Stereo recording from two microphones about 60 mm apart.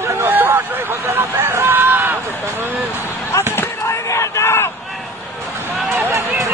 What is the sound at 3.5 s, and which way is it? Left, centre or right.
Basketball bounce, left.